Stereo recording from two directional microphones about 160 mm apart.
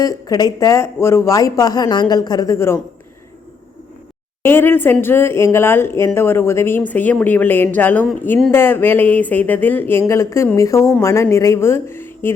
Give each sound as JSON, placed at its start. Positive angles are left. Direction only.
{"t": 0.0, "sound": "speech", "side_deg": 25}
{"t": 4.4, "sound": "speech", "side_deg": 15}